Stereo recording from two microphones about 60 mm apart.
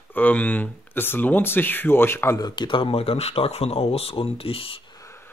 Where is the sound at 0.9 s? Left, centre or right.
Left.